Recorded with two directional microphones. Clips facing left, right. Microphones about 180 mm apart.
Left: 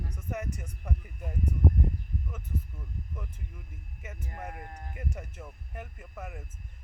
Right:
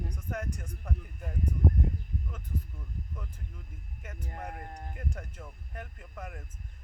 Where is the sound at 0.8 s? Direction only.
5° left (ahead or behind).